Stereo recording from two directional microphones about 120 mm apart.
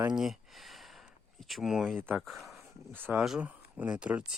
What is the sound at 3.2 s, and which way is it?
Speech, 5° right (ahead or behind).